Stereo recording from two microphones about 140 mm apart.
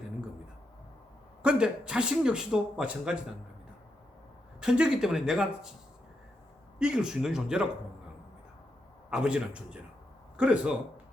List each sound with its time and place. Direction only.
1.4 s a man's voice: 5° right (ahead or behind)
4.6 s a man's voice: 5° right (ahead or behind)
6.7 s a man's voice: 5° right (ahead or behind)
9.0 s a man's voice: 5° right (ahead or behind)